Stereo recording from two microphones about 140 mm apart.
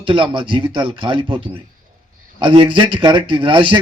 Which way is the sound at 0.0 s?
40° right (ahead or behind).